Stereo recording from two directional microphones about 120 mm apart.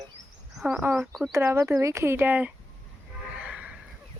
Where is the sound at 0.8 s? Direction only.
15° right (ahead or behind).